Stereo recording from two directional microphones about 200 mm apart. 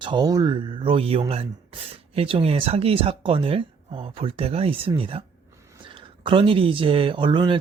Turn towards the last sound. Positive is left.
turn(degrees=-25)  # may be behind; listen again after turning